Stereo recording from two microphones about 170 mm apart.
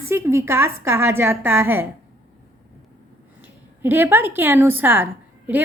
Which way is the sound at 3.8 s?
10° right (ahead or behind).